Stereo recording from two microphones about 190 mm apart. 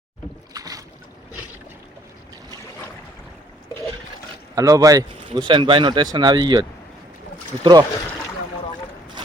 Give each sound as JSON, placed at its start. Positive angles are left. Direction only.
{"t": 0.5, "sound": "boat", "side_deg": -20}
{"t": 4.5, "sound": "speech", "side_deg": -15}